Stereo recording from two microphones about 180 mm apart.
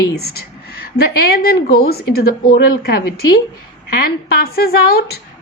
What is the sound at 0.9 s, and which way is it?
A woman's voice, 60° left (ahead or behind).